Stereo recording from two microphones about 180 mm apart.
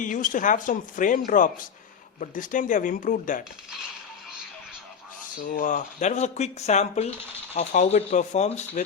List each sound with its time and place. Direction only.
0.0 s speech: 45° left (ahead or behind)
5.4 s speech: 50° left (ahead or behind)